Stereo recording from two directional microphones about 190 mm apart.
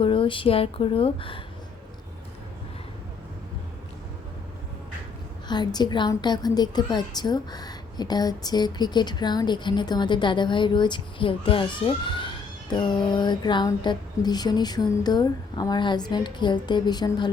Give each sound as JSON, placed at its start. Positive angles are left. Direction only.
{"t": 0.0, "sound": "a woman's voice", "side_deg": 25}
{"t": 5.5, "sound": "a woman's voice", "side_deg": 20}